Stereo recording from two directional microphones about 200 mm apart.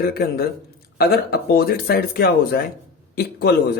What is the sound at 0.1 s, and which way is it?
Speech, 50° left (ahead or behind).